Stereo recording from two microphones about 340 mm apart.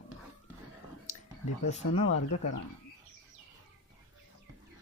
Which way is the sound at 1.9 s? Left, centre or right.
Left.